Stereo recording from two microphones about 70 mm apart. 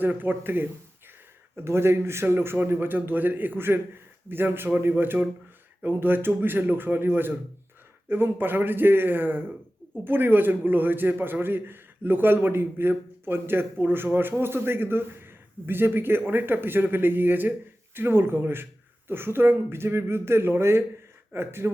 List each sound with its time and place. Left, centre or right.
0.0 s a man's voice: right